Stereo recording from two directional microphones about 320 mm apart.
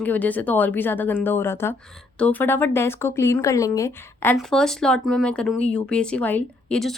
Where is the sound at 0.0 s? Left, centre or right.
Centre.